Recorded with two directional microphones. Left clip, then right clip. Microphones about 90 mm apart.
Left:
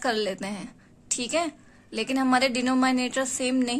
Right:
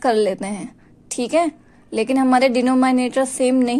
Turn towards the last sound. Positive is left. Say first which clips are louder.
# right 9 dB
turn(degrees=-45)  # may be behind; listen again after turning